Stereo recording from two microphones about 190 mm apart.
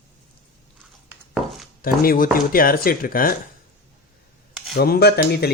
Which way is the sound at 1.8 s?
50° left (ahead or behind).